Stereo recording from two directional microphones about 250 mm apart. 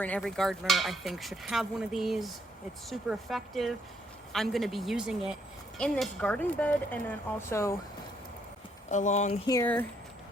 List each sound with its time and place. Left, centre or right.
0.0 s speech: centre
8.9 s speech: left
9.5 s speech: centre